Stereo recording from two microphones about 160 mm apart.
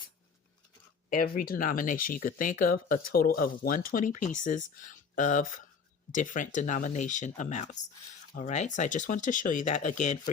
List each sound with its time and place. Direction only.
1.1 s speech: 60° left (ahead or behind)